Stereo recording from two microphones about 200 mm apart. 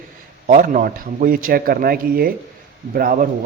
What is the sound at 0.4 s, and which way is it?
A man's voice, 40° right (ahead or behind).